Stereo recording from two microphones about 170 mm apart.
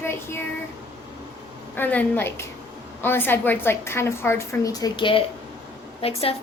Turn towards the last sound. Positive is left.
turn(degrees=35)  # may be behind; listen again after turning